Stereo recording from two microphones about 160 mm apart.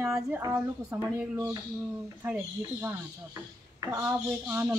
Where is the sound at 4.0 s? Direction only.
15° right (ahead or behind).